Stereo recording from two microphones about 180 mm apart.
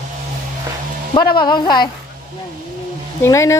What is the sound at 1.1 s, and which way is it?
Speech, 25° left (ahead or behind).